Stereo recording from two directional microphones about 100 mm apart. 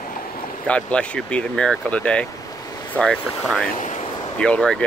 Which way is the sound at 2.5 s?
40° left (ahead or behind).